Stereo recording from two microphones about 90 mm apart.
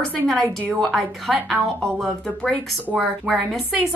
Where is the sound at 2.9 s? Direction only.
10° right (ahead or behind).